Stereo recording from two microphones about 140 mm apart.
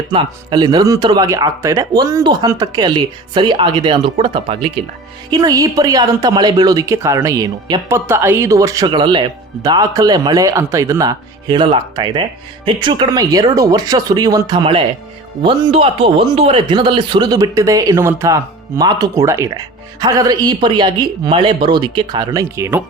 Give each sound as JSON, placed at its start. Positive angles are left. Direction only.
{"t": 0.1, "sound": "speech", "side_deg": -35}
{"t": 5.3, "sound": "speech", "side_deg": -30}
{"t": 7.9, "sound": "speech", "side_deg": -15}